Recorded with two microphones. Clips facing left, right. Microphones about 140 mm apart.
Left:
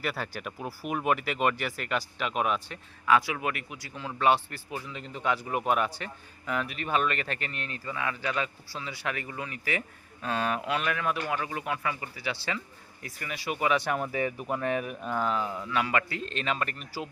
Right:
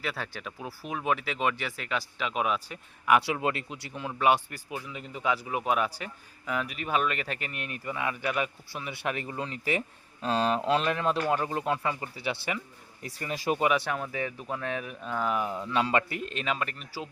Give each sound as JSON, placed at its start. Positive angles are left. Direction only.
{"t": 0.0, "sound": "speech", "side_deg": 5}
{"t": 3.1, "sound": "speech", "side_deg": -25}
{"t": 11.3, "sound": "speech", "side_deg": -40}
{"t": 11.6, "sound": "speech", "side_deg": -25}
{"t": 13.7, "sound": "speech", "side_deg": -5}
{"t": 13.9, "sound": "speech", "side_deg": 5}
{"t": 15.3, "sound": "speech", "side_deg": -15}
{"t": 16.2, "sound": "speech", "side_deg": -5}